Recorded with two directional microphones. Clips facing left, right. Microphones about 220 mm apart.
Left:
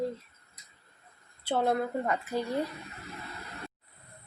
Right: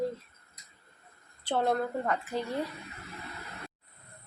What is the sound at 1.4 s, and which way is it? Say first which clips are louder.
A woman's voice: left 1 dB; 5° left (ahead or behind).